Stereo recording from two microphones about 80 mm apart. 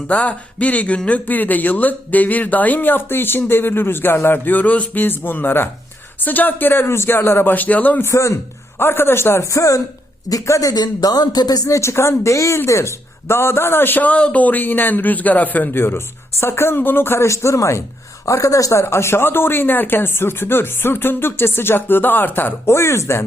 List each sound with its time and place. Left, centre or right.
0.1 s speech: centre
8.0 s a man's voice: left
10.8 s speech: left